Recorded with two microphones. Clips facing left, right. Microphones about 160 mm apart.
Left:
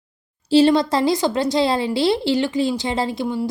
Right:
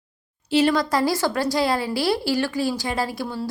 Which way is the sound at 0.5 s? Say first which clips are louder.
Left 5 dB; 25° left (ahead or behind).